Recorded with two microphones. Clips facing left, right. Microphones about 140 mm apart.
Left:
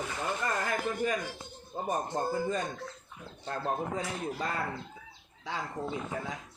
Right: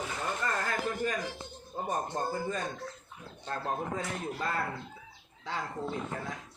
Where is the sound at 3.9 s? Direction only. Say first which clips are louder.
Left 1 dB; 15° left (ahead or behind).